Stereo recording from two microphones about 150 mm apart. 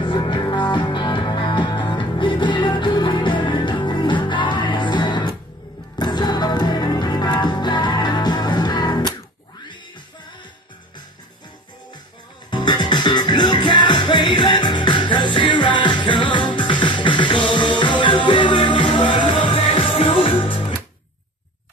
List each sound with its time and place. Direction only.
0.0 s music: 35° left (ahead or behind)
12.4 s music: 30° left (ahead or behind)